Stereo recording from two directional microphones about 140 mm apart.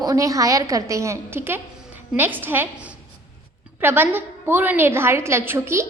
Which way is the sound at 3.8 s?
15° right (ahead or behind).